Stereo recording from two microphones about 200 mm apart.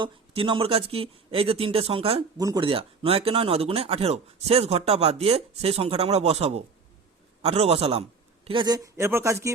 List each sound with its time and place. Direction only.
0.0 s speech: 25° right (ahead or behind)